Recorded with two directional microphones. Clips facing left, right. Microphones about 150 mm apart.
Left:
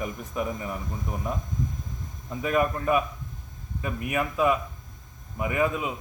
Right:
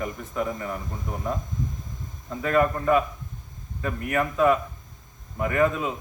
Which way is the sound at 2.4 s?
15° left (ahead or behind).